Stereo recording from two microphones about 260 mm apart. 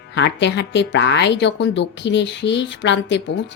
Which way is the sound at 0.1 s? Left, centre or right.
Left.